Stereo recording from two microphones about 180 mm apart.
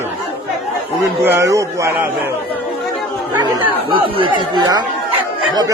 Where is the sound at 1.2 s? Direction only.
10° right (ahead or behind).